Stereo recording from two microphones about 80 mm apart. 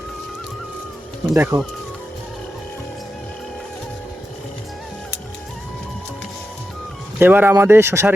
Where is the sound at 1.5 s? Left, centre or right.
Right.